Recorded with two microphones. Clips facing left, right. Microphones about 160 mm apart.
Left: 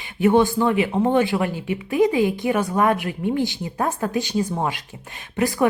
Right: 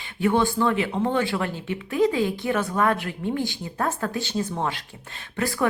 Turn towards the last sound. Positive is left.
turn(degrees=20)  # may be behind; listen again after turning